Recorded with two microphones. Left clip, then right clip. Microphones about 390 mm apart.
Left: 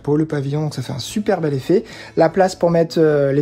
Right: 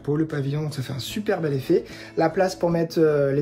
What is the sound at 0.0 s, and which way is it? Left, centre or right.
Speech, centre.